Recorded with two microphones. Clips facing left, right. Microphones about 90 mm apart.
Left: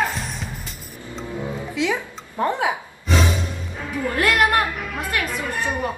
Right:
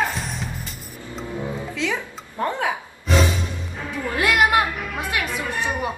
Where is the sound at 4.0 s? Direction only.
5° right (ahead or behind).